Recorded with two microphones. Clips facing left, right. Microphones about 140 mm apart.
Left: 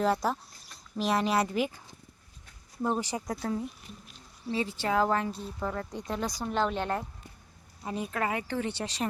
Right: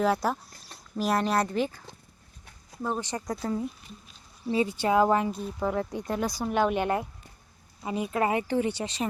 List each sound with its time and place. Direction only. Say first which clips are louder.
0.0 s speech: right 2 dB; centre (ahead or behind)
2.9 s speech: right 3 dB; 10° left (ahead or behind)
4.5 s speech: right 5 dB; 15° right (ahead or behind)
8.2 s speech: right 6 dB; 20° right (ahead or behind)
8.7 s speech: right 2 dB; centre (ahead or behind)